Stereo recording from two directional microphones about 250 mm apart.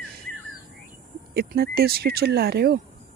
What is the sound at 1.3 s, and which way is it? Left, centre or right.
Speech, right.